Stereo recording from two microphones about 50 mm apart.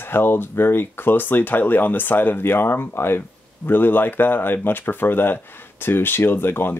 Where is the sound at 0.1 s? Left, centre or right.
Left.